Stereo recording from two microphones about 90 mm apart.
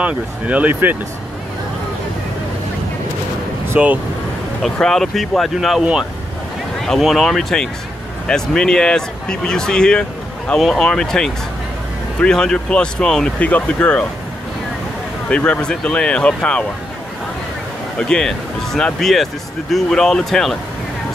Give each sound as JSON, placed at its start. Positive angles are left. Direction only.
{"t": 0.0, "sound": "speech", "side_deg": -15}
{"t": 3.6, "sound": "speech", "side_deg": -20}
{"t": 4.6, "sound": "speech", "side_deg": 5}
{"t": 6.9, "sound": "speech", "side_deg": 0}
{"t": 15.2, "sound": "speech", "side_deg": 10}
{"t": 17.9, "sound": "speech", "side_deg": 10}